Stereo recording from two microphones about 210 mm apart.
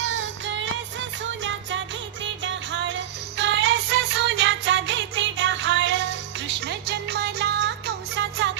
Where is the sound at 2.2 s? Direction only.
60° right (ahead or behind).